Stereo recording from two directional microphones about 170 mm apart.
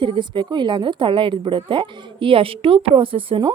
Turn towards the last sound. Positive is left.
turn(degrees=-30)  # may be behind; listen again after turning